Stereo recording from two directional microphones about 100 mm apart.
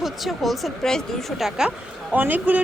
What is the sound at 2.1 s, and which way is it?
Speech, 20° right (ahead or behind).